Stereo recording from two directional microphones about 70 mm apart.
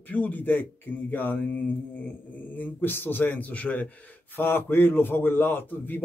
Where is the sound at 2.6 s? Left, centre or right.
Left.